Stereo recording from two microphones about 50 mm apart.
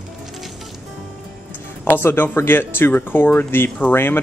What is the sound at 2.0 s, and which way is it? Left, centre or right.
Speech, left.